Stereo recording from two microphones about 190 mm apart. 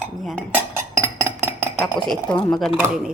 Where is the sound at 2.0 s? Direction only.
25° left (ahead or behind).